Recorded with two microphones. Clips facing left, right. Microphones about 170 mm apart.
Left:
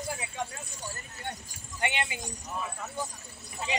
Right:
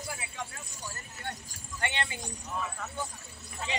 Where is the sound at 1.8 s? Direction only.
15° left (ahead or behind).